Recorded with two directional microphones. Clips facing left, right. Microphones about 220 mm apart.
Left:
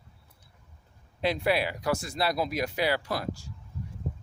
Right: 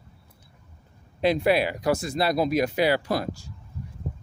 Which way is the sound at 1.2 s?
20° right (ahead or behind).